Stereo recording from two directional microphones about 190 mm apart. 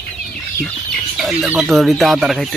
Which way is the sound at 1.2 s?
Centre (ahead or behind).